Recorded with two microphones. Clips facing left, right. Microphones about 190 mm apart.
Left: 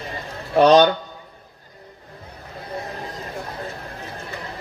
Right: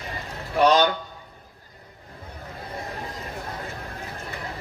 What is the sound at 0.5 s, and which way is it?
Speech, 30° left (ahead or behind).